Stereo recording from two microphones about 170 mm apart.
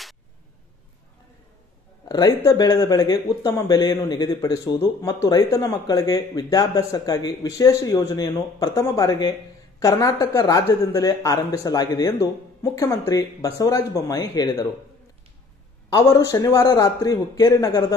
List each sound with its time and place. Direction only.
2.0 s speech: 25° left (ahead or behind)
15.9 s speech: 20° left (ahead or behind)